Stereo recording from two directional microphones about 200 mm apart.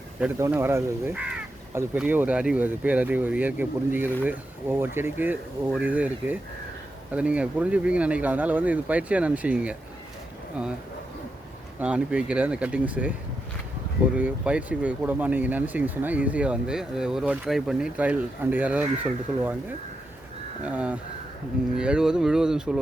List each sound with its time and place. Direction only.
0.2 s speech: 15° right (ahead or behind)
11.8 s speech: 5° right (ahead or behind)
14.2 s speech: 5° right (ahead or behind)
20.6 s speech: 5° right (ahead or behind)